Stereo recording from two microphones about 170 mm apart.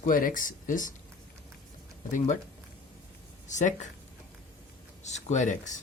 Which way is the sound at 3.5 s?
45° left (ahead or behind).